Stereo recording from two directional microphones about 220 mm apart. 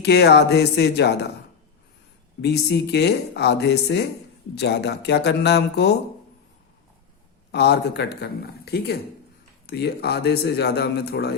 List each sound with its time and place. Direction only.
0.0 s a man's voice: 50° left (ahead or behind)
2.4 s a man's voice: 50° left (ahead or behind)
7.5 s a man's voice: 50° left (ahead or behind)